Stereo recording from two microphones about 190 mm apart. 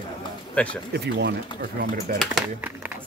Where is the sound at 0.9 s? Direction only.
60° right (ahead or behind).